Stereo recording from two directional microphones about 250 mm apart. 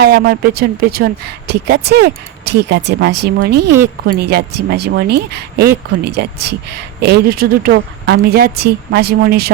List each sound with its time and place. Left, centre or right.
0.0 s speech: right